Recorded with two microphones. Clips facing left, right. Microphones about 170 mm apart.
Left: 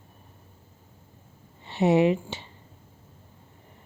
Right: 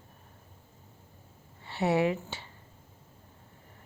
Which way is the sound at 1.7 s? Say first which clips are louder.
Left 6 dB; 20° left (ahead or behind).